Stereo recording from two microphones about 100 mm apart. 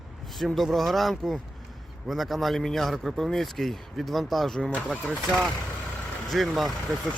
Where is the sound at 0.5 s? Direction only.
Centre (ahead or behind).